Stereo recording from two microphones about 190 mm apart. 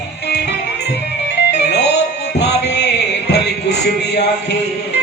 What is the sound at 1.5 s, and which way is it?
Music, 60° left (ahead or behind).